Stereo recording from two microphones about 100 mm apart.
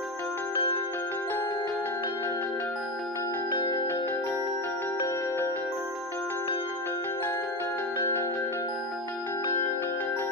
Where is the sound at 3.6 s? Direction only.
55° left (ahead or behind).